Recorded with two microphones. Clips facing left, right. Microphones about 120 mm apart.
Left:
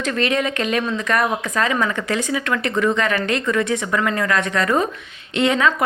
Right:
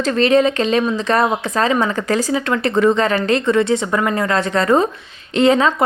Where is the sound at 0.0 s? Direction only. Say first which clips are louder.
Right 7 dB; 35° right (ahead or behind).